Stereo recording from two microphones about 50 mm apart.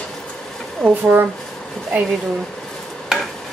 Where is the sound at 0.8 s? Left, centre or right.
Right.